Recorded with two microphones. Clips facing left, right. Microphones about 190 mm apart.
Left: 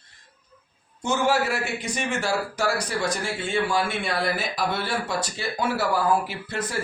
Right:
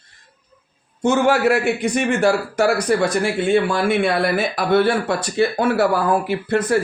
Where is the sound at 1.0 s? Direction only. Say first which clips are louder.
Right 7 dB; 60° right (ahead or behind).